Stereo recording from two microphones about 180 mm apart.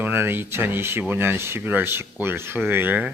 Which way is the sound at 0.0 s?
10° right (ahead or behind).